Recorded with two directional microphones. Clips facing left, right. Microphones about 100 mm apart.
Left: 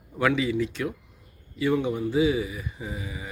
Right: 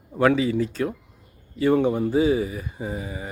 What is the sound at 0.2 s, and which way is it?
Speech, 40° right (ahead or behind).